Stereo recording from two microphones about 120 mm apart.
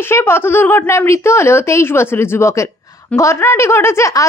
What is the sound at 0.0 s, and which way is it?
A woman's voice, 20° left (ahead or behind).